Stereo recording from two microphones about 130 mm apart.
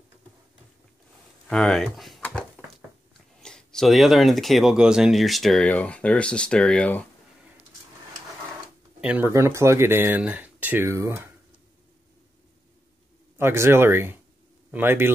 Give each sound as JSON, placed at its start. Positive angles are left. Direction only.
{"t": 1.5, "sound": "speech", "side_deg": 0}
{"t": 2.2, "sound": "a sound", "side_deg": 10}
{"t": 3.3, "sound": "speech", "side_deg": 5}
{"t": 9.0, "sound": "speech", "side_deg": -10}
{"t": 9.3, "sound": "speech", "side_deg": -20}
{"t": 13.4, "sound": "speech", "side_deg": -20}